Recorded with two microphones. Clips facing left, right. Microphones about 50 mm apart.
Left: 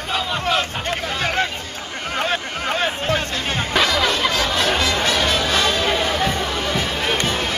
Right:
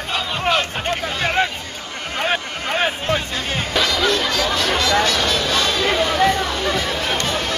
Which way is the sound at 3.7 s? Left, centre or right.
Left.